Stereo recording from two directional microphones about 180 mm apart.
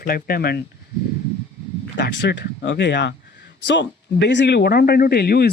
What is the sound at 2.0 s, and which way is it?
Speech, 75° left (ahead or behind).